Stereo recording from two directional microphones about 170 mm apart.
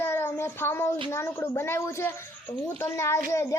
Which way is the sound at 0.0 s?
15° left (ahead or behind).